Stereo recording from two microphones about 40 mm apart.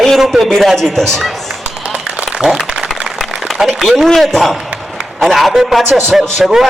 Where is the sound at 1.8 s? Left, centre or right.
Right.